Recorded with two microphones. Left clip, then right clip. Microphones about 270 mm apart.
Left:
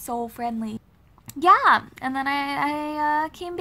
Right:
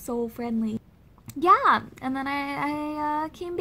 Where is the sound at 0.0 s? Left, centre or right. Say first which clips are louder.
Left 2 dB; left.